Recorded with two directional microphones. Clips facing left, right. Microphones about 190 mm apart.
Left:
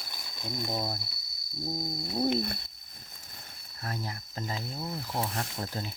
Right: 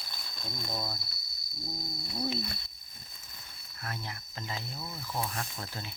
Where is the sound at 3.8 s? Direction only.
35° left (ahead or behind).